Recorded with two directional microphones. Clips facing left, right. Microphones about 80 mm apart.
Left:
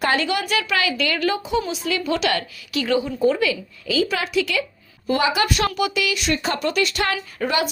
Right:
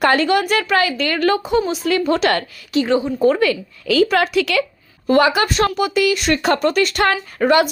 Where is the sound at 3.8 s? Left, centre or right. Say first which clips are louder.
Right 7 dB; right.